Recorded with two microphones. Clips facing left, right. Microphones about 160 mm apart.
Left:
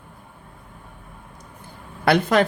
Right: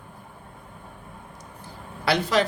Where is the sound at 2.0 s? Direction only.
55° left (ahead or behind).